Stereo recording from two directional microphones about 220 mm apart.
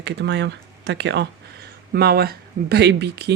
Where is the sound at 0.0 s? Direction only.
55° right (ahead or behind).